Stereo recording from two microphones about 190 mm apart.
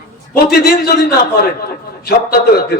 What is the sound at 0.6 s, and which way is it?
A man's voice, 55° left (ahead or behind).